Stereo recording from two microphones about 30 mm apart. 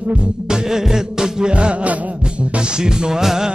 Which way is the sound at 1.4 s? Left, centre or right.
Right.